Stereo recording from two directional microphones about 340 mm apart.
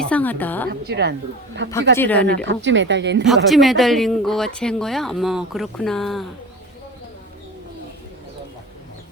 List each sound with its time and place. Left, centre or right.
0.0 s a woman's voice: centre
0.7 s a woman's voice: right
2.0 s speech: centre
2.2 s speech: right
3.2 s speech: centre